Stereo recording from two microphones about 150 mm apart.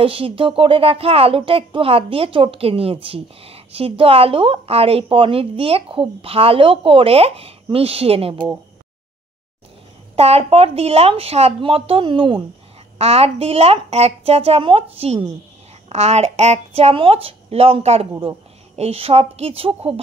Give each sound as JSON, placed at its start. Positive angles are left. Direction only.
{"t": 0.0, "sound": "a woman's voice", "side_deg": -35}
{"t": 10.1, "sound": "a woman's voice", "side_deg": -45}